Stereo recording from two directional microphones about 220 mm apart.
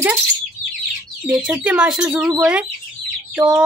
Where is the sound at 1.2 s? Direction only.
5° right (ahead or behind).